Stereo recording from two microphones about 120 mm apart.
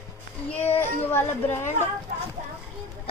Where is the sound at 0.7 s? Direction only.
20° left (ahead or behind).